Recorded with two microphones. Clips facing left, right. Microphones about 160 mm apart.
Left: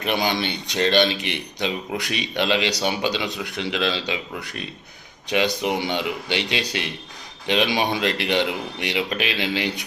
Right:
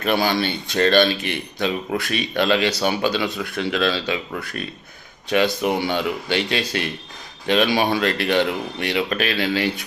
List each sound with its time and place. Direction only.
0.0 s speech: 15° left (ahead or behind)